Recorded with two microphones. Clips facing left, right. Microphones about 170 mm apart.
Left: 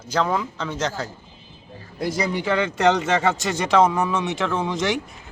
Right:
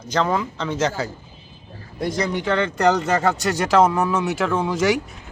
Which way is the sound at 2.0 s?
5° left (ahead or behind).